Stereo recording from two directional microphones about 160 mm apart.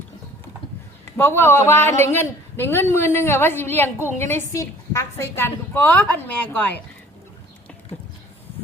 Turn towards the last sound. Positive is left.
turn(degrees=10)  # may be behind; listen again after turning